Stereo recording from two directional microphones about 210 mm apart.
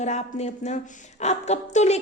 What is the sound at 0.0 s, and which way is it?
A woman's voice, 30° left (ahead or behind).